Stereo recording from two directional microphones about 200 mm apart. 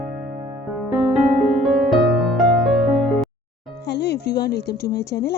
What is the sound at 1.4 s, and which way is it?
Music, centre (ahead or behind).